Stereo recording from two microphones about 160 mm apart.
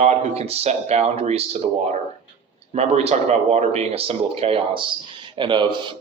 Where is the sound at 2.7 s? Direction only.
45° right (ahead or behind).